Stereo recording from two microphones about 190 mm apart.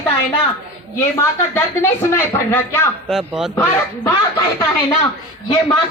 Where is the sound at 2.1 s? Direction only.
15° left (ahead or behind).